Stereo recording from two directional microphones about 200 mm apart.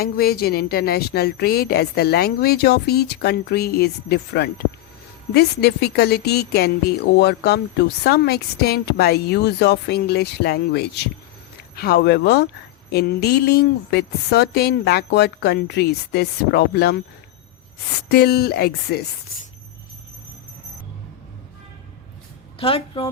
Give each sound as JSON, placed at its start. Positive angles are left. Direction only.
{"t": 0.0, "sound": "a woman's voice", "side_deg": 50}
{"t": 18.1, "sound": "a woman's voice", "side_deg": 55}
{"t": 22.5, "sound": "a woman's voice", "side_deg": 25}